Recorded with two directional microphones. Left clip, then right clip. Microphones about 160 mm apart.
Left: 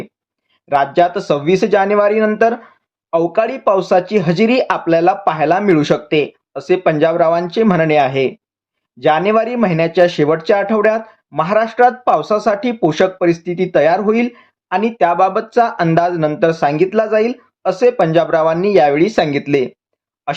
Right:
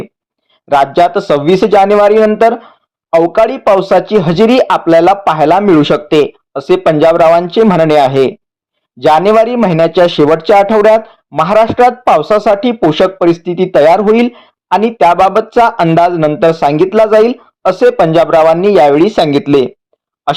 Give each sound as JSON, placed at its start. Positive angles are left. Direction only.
{"t": 0.7, "sound": "speech", "side_deg": -35}